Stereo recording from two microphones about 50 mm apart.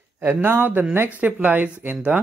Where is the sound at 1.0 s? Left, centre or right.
Right.